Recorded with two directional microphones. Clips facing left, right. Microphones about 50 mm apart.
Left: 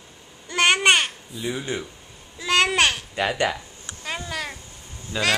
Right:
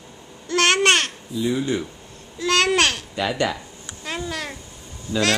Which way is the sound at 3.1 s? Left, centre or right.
Left.